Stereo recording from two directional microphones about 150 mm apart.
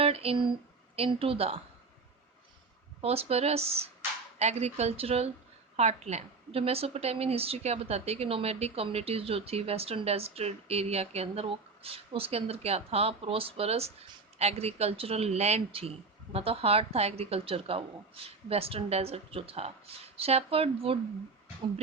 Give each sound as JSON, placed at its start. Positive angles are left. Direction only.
{"t": 0.0, "sound": "a woman's voice", "side_deg": -40}
{"t": 3.0, "sound": "a woman's voice", "side_deg": -40}